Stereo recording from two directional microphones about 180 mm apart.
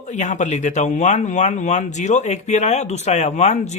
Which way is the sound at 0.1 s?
40° left (ahead or behind).